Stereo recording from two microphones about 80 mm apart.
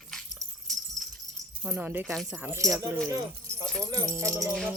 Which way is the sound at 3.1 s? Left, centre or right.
Right.